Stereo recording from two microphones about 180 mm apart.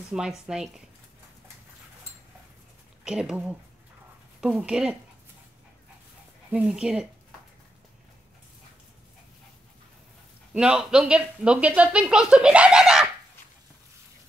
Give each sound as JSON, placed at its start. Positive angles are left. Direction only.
{"t": 0.1, "sound": "speech", "side_deg": -5}
{"t": 3.0, "sound": "a woman's voice", "side_deg": -5}
{"t": 6.5, "sound": "speech", "side_deg": -5}
{"t": 10.5, "sound": "speech", "side_deg": -5}